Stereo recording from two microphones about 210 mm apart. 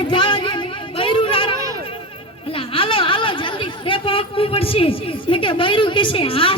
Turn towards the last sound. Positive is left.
turn(degrees=25)  # may be behind; listen again after turning